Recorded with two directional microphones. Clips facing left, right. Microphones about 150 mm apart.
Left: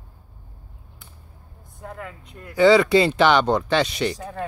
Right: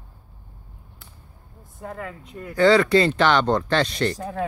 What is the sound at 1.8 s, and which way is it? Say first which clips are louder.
Speech: right 3 dB; centre (ahead or behind).